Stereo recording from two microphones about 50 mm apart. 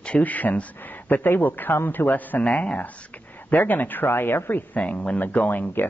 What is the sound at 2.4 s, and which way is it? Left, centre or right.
Speech, left.